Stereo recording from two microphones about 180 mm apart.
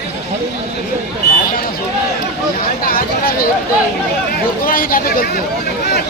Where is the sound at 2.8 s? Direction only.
55° left (ahead or behind).